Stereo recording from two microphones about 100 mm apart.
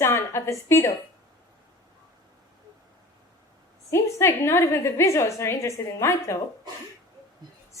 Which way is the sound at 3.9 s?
25° left (ahead or behind).